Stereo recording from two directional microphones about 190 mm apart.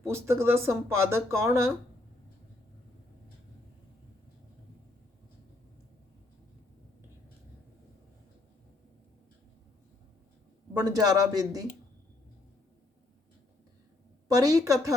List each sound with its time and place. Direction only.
0.1 s speech: 15° right (ahead or behind)
10.8 s a man's voice: 20° right (ahead or behind)
14.3 s speech: 20° right (ahead or behind)